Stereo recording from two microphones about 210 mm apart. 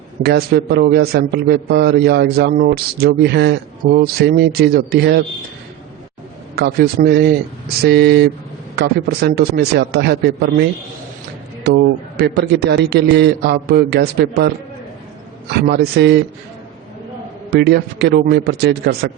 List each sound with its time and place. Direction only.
0.2 s a man's voice: 50° right (ahead or behind)
6.6 s a man's voice: 50° right (ahead or behind)
17.5 s a man's voice: 50° right (ahead or behind)